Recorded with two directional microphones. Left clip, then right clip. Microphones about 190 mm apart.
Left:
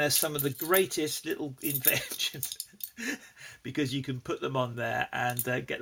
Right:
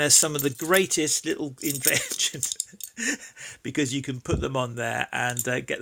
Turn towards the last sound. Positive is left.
turn(degrees=-40)  # may be behind; listen again after turning